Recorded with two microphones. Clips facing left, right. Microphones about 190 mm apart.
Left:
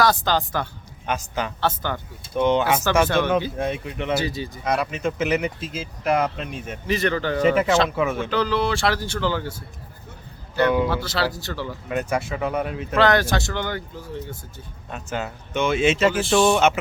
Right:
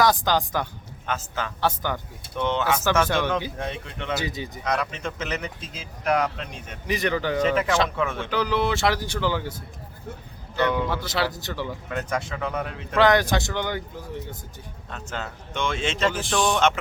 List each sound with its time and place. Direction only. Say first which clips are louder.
0.0 s speech: left 1 dB; 15° right (ahead or behind)
1.0 s speech: left 3 dB; 15° left (ahead or behind)
1.6 s speech: right 1 dB; 15° right (ahead or behind)
2.3 s speech: left 5 dB; 15° left (ahead or behind)
4.2 s speech: left 4 dB; 20° right (ahead or behind)
4.6 s speech: left 4 dB; 10° left (ahead or behind)
6.8 s speech: left 2 dB; 15° right (ahead or behind)
7.4 s speech: left 6 dB; 10° left (ahead or behind)
8.3 s speech: left 2 dB; 15° right (ahead or behind)
10.6 s speech: left 4 dB; 10° left (ahead or behind)
11.0 s speech: left 1 dB; 20° right (ahead or behind)
11.9 s speech: left 6 dB; 10° left (ahead or behind)
13.0 s speech: even; 15° right (ahead or behind)
14.8 s speech: left 5 dB; 10° left (ahead or behind)